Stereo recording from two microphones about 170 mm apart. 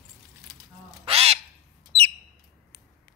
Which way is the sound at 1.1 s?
35° right (ahead or behind).